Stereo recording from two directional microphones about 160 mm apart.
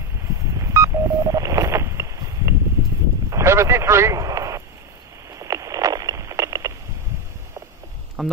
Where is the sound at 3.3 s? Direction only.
20° right (ahead or behind).